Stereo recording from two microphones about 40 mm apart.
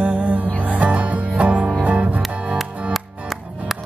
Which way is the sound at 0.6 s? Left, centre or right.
Right.